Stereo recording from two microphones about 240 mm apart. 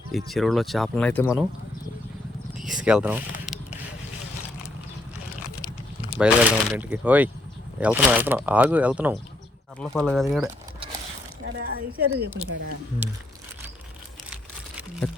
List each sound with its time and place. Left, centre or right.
0.1 s speech: centre
2.6 s a sound: centre
6.1 s speech: centre
11.4 s speech: right